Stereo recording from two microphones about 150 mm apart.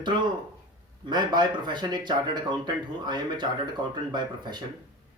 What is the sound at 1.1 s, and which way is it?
A man's voice, 30° right (ahead or behind).